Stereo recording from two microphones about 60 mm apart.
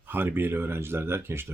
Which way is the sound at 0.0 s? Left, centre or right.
Right.